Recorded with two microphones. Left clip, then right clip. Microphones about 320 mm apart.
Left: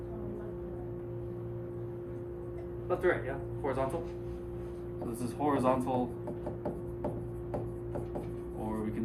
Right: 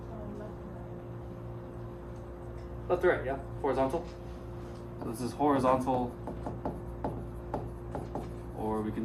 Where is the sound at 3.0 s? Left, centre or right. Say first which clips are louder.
Right 2 dB; right.